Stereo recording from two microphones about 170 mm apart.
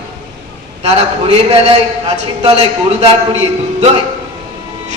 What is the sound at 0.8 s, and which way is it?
A man's voice, 35° right (ahead or behind).